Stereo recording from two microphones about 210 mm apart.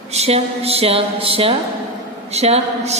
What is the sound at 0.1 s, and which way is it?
A woman's voice, 30° right (ahead or behind).